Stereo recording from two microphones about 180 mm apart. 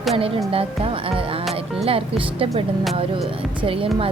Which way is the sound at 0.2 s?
30° right (ahead or behind).